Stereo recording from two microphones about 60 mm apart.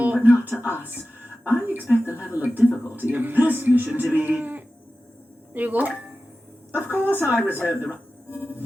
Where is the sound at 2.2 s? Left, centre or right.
Right.